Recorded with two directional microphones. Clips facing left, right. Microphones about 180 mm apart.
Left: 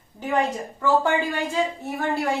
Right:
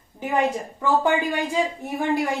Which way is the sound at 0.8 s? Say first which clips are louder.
Even; 15° right (ahead or behind).